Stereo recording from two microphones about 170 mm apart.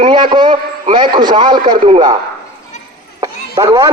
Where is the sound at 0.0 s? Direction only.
30° right (ahead or behind).